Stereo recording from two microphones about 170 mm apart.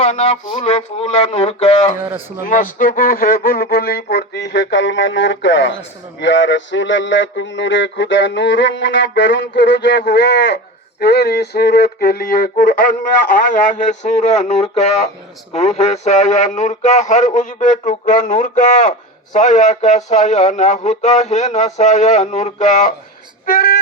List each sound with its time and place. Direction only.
0.0 s a sound: 40° left (ahead or behind)
0.4 s speech: 35° left (ahead or behind)
2.4 s speech: 55° left (ahead or behind); by 5.7 s 90° left
6.1 s mantra: 90° left
11.0 s speech: 70° left (ahead or behind); by 23.0 s 45° left (ahead or behind)
23.5 s speech: 60° left (ahead or behind)